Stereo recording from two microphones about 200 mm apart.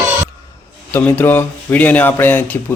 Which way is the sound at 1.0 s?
10° left (ahead or behind).